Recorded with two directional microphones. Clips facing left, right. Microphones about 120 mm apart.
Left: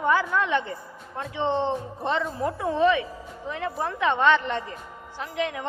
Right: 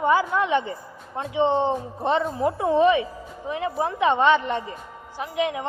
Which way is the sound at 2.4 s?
20° right (ahead or behind).